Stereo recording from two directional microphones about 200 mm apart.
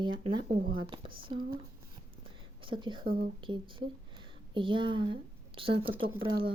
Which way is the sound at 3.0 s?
50° right (ahead or behind).